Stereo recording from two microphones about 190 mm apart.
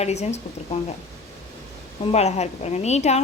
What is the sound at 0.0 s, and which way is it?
Speech, 35° left (ahead or behind).